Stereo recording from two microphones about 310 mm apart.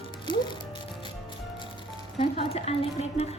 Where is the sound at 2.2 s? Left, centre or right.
Centre.